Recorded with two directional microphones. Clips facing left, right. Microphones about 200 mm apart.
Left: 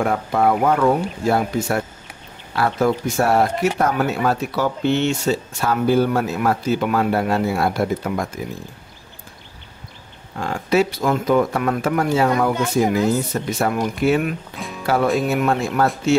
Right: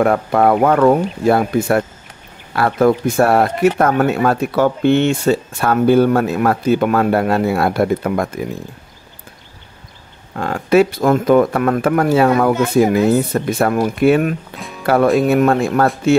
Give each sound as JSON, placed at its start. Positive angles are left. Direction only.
{"t": 0.0, "sound": "speech", "side_deg": -60}
{"t": 10.3, "sound": "speech", "side_deg": -60}